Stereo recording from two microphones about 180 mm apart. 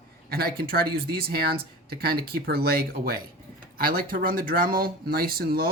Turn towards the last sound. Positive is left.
turn(degrees=-55)  # may be behind; listen again after turning